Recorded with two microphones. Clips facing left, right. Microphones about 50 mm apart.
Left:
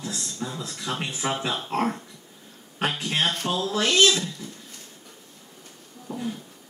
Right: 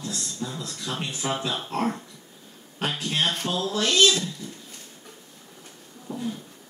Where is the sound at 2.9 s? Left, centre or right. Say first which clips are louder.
Right 1 dB; centre.